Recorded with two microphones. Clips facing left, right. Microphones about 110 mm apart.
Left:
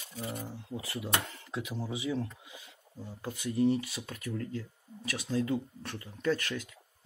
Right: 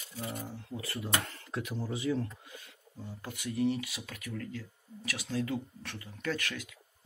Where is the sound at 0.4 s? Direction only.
25° left (ahead or behind).